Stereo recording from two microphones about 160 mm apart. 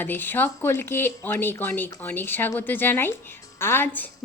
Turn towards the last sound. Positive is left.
turn(degrees=15)  # may be behind; listen again after turning